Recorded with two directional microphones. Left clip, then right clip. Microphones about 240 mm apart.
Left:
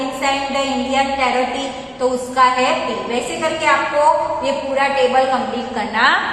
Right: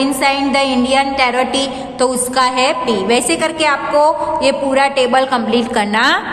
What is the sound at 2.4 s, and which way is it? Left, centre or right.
Speech, right.